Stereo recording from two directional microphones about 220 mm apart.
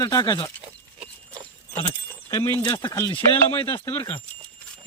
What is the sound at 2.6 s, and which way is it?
Speech, 15° left (ahead or behind).